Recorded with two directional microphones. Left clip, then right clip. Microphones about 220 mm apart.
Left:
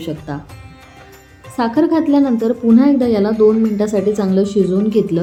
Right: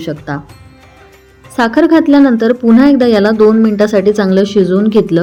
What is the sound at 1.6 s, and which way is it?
A woman's voice, 25° right (ahead or behind).